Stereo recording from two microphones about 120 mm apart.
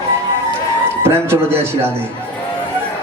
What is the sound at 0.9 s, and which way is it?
Speech, 20° right (ahead or behind).